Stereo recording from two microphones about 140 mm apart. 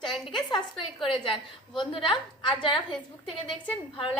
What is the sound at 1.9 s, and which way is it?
Speech, 35° left (ahead or behind).